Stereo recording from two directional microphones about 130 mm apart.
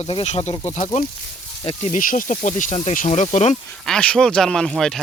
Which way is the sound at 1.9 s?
90° left.